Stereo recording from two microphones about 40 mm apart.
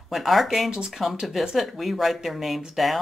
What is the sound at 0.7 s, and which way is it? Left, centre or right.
Speech, right.